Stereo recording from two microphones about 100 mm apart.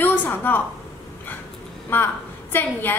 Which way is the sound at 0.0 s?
20° left (ahead or behind).